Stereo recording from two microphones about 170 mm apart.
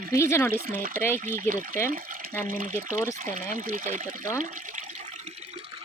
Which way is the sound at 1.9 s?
55° right (ahead or behind).